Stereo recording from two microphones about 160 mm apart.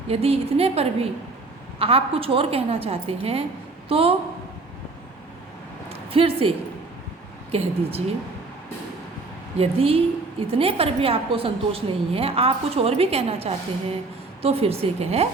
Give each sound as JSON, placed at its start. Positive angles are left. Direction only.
{"t": 0.1, "sound": "a woman's voice", "side_deg": -40}
{"t": 5.9, "sound": "a sound", "side_deg": -35}
{"t": 7.5, "sound": "a woman's voice", "side_deg": -40}
{"t": 9.6, "sound": "a woman's voice", "side_deg": -35}